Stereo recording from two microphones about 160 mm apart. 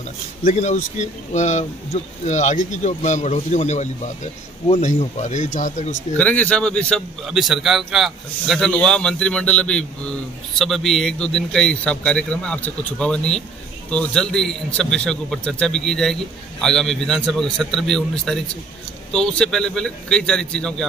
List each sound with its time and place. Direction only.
0.4 s speech: 50° left (ahead or behind)
6.1 s a man's voice: 10° left (ahead or behind)